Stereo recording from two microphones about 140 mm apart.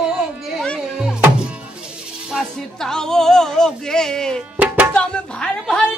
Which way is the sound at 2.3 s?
5° left (ahead or behind).